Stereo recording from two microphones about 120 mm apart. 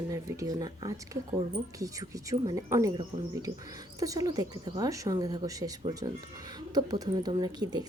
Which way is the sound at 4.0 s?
30° right (ahead or behind).